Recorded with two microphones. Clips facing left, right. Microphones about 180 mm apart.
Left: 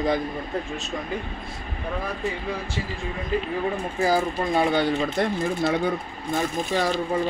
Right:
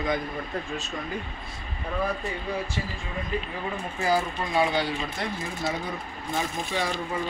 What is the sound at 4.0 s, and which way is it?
Speech, 40° left (ahead or behind).